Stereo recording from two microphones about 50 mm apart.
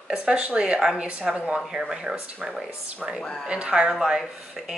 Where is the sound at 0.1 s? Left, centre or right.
Centre.